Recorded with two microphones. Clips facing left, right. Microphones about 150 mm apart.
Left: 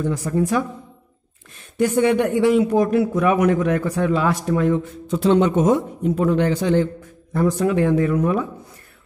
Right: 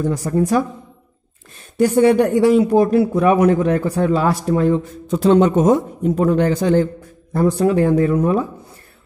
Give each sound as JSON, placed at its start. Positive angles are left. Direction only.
{"t": 0.0, "sound": "a man's voice", "side_deg": -40}
{"t": 1.8, "sound": "a man's voice", "side_deg": -35}